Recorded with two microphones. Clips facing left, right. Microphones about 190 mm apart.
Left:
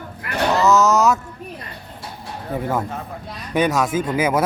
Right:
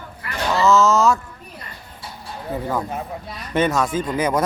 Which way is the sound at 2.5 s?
5° left (ahead or behind).